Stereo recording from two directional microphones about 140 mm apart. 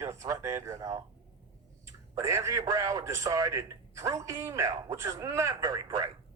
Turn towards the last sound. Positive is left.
turn(degrees=-25)  # may be behind; listen again after turning